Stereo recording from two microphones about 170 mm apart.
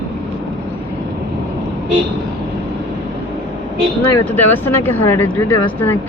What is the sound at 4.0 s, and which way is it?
Speech, 10° left (ahead or behind).